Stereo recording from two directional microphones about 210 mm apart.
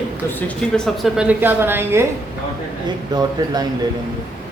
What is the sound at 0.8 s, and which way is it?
A woman's voice, centre (ahead or behind).